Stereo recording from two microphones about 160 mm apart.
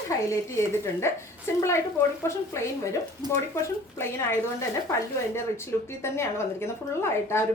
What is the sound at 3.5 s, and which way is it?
A woman's voice, 15° left (ahead or behind).